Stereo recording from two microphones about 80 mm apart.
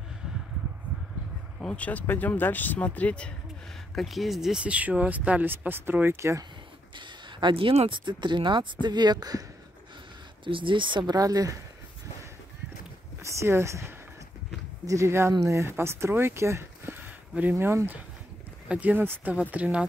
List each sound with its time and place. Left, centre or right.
1.6 s speech: centre
3.9 s speech: centre; by 6.4 s right
7.0 s speech: right
8.8 s speech: right
10.4 s speech: right
11.1 s speech: right
13.2 s speech: right
17.3 s speech: right